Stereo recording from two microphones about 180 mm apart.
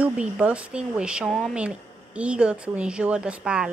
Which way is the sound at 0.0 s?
5° right (ahead or behind).